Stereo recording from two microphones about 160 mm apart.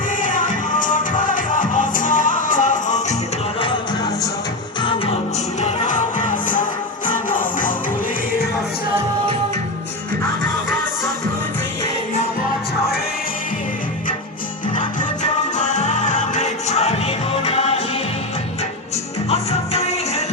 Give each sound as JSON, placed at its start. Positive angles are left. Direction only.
{"t": 0.2, "sound": "music", "side_deg": 55}
{"t": 3.6, "sound": "music", "side_deg": 30}
{"t": 5.5, "sound": "music", "side_deg": 50}
{"t": 14.8, "sound": "music", "side_deg": 50}
{"t": 19.3, "sound": "music", "side_deg": 40}